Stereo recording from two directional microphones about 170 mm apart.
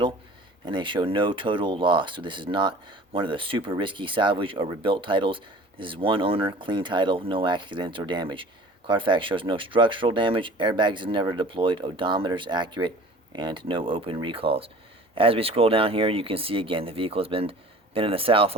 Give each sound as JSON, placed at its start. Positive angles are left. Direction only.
{"t": 0.6, "sound": "speech", "side_deg": -30}